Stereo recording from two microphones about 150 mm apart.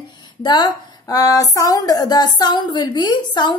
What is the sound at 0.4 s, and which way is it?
Speech, 25° left (ahead or behind).